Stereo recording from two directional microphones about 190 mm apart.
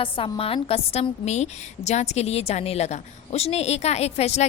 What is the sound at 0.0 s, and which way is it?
A woman's voice, 30° left (ahead or behind).